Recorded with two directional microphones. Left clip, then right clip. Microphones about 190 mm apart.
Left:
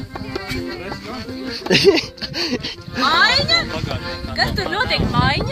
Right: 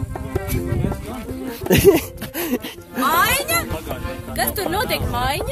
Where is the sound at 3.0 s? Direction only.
55° right (ahead or behind).